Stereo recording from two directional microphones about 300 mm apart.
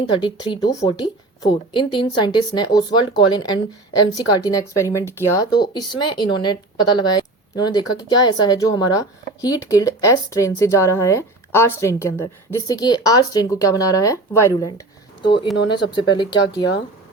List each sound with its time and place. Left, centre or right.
0.2 s speech: centre